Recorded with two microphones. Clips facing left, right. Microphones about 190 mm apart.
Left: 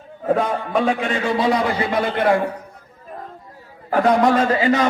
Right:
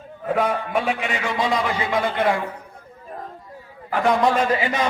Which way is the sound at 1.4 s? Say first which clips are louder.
Left 3 dB; 20° right (ahead or behind).